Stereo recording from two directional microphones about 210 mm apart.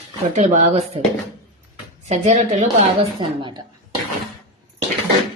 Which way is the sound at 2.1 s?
35° right (ahead or behind).